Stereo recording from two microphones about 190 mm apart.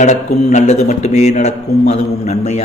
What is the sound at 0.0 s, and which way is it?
Speech, 35° left (ahead or behind).